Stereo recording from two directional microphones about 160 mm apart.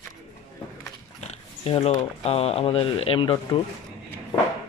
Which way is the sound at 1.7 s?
40° left (ahead or behind).